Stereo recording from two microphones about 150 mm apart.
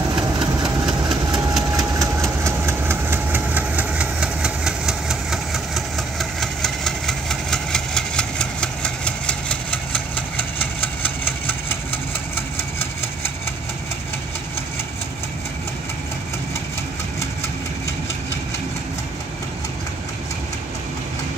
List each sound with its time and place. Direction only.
0.1 s engine: 30° right (ahead or behind)
0.8 s vehicle: 5° right (ahead or behind)
1.7 s engine: 20° right (ahead or behind); by 13.3 s 15° left (ahead or behind)